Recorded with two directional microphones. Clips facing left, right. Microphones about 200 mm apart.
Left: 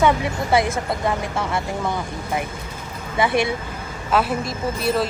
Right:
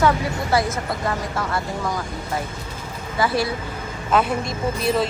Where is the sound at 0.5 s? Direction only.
25° left (ahead or behind).